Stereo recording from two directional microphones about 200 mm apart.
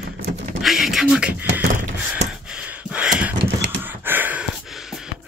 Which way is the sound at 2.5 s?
5° right (ahead or behind).